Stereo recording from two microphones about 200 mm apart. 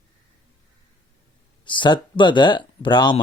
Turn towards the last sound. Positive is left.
turn(degrees=20)  # may be behind; listen again after turning